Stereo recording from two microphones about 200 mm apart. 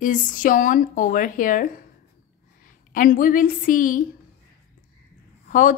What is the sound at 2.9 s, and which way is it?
A woman's voice, 45° left (ahead or behind).